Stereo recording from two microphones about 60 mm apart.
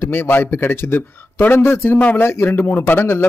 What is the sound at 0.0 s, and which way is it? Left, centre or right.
Speech, left.